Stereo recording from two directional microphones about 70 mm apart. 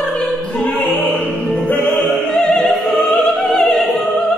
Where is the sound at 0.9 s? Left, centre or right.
Left.